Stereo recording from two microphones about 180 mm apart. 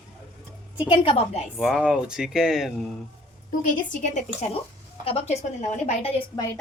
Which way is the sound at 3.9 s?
45° left (ahead or behind).